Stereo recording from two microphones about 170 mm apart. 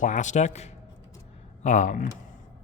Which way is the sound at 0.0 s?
45° left (ahead or behind).